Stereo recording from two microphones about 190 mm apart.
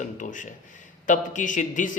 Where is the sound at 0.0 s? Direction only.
40° left (ahead or behind).